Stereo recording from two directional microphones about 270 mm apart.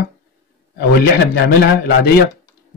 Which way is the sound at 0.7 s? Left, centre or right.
Left.